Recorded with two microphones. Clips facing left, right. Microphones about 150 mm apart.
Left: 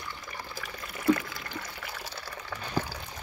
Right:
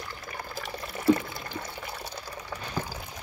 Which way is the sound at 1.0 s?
30° right (ahead or behind).